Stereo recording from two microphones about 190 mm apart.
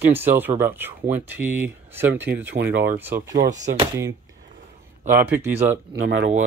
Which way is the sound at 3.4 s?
40° right (ahead or behind).